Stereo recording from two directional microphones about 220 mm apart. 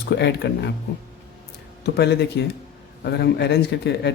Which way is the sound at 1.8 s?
50° left (ahead or behind).